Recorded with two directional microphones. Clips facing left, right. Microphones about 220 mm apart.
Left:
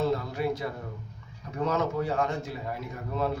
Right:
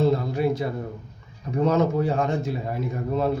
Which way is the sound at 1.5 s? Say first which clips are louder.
Right 7 dB; 25° right (ahead or behind).